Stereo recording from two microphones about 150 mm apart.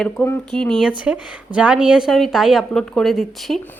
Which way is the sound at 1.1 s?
10° right (ahead or behind).